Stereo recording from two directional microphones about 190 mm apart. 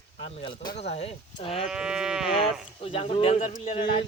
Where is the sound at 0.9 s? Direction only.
30° left (ahead or behind).